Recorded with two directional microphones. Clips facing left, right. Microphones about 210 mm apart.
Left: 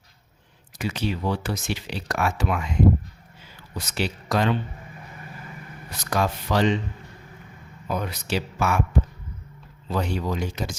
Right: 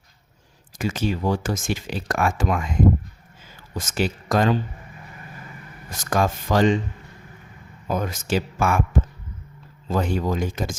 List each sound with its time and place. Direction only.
0.8 s speech: 45° right (ahead or behind)
3.8 s speech: 45° right (ahead or behind)
6.0 s speech: 45° right (ahead or behind)
7.9 s speech: 45° right (ahead or behind)
9.9 s speech: 50° right (ahead or behind)